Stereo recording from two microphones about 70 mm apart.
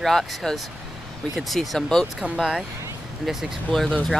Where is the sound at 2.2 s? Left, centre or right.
Centre.